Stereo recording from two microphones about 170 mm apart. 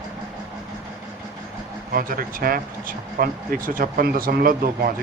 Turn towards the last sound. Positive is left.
turn(degrees=-60)  # may be behind; listen again after turning